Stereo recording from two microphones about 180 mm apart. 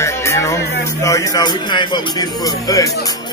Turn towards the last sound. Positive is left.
turn(degrees=20)  # may be behind; listen again after turning